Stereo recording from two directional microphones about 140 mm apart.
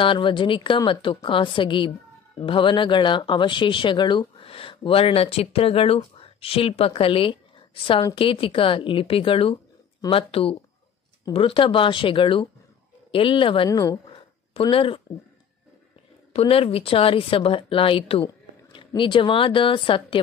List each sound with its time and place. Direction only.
0.0 s speech: 35° left (ahead or behind)
13.7 s a woman's voice: 25° left (ahead or behind)
14.1 s a sound: 40° left (ahead or behind)
16.3 s speech: 45° left (ahead or behind)